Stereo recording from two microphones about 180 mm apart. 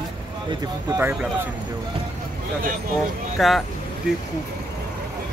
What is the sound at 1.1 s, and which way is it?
Speech, 10° right (ahead or behind).